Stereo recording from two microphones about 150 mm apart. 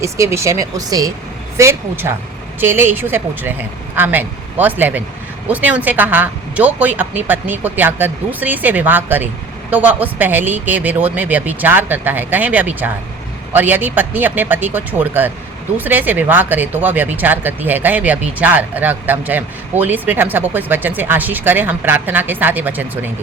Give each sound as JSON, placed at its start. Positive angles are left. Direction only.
{"t": 0.0, "sound": "speech", "side_deg": -20}